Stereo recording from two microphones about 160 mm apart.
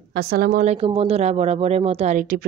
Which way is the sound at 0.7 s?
35° right (ahead or behind).